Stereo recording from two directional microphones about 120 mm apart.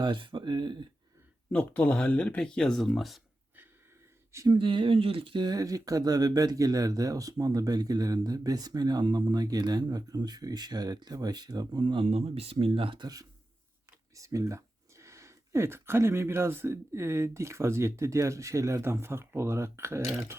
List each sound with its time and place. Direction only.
0.0 s speech: 40° right (ahead or behind)
1.5 s speech: 10° left (ahead or behind)
4.4 s speech: 45° right (ahead or behind)
14.2 s speech: 25° right (ahead or behind)